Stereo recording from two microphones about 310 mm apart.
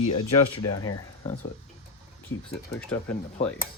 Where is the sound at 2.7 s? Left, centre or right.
Centre.